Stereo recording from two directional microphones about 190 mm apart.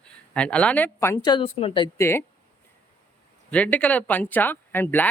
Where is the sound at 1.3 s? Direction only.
30° left (ahead or behind).